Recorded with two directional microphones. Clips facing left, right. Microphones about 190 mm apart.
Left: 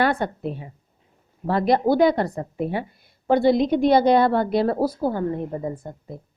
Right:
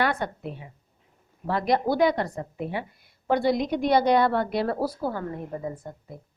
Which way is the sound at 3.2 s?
25° left (ahead or behind).